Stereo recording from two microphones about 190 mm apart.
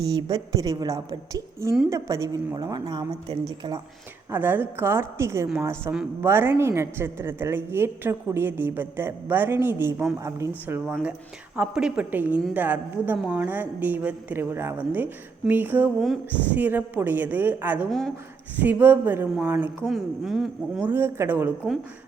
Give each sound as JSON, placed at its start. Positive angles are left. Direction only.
{"t": 0.0, "sound": "a woman's voice", "side_deg": -20}
{"t": 4.3, "sound": "a woman's voice", "side_deg": -10}
{"t": 16.0, "sound": "speech", "side_deg": 5}
{"t": 16.6, "sound": "a woman's voice", "side_deg": -10}
{"t": 20.9, "sound": "a woman's voice", "side_deg": -10}